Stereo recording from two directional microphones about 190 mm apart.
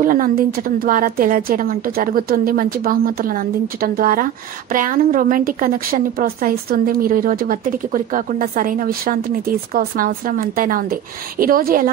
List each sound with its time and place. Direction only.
0.0 s a woman's voice: 45° right (ahead or behind)